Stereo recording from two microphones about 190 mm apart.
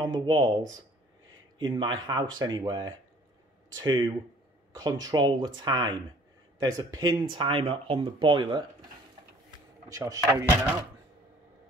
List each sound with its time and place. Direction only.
0.0 s speech: 25° right (ahead or behind)
9.8 s speech: 15° right (ahead or behind)